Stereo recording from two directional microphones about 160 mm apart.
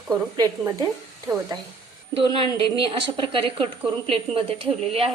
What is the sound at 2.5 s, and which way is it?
A woman's voice, 35° right (ahead or behind).